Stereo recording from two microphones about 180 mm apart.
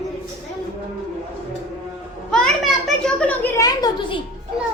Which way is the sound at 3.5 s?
20° left (ahead or behind).